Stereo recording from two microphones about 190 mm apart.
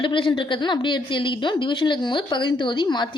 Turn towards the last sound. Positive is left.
turn(degrees=25)  # may be behind; listen again after turning